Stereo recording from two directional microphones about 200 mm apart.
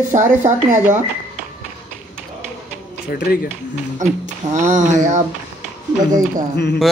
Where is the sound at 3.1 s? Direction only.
50° left (ahead or behind).